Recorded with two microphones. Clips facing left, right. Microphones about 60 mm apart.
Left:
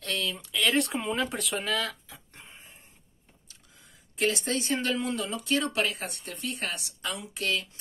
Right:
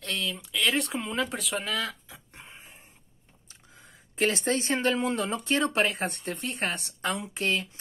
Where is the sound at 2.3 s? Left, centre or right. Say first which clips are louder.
Right 2 dB; right.